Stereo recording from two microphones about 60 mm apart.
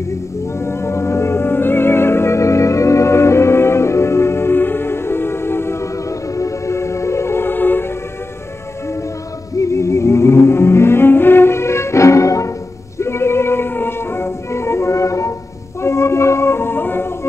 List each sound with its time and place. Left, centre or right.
0.6 s music: left
9.6 s music: left
13.0 s music: left